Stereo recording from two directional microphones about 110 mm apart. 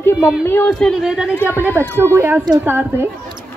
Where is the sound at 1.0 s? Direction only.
5° right (ahead or behind).